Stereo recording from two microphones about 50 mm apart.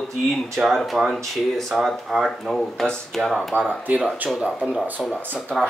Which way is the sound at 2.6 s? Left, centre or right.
Centre.